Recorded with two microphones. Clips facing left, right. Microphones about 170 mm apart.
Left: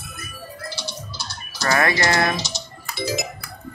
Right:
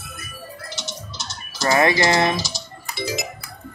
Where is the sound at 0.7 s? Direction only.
20° right (ahead or behind).